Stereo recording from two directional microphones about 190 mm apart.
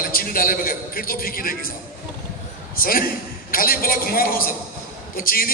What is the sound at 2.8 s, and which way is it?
A man's voice, 50° left (ahead or behind).